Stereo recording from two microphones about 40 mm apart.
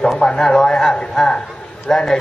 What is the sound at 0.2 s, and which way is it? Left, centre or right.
A man's voice, centre.